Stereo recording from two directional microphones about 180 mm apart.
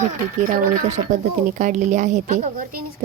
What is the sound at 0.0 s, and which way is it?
Speech, 45° right (ahead or behind).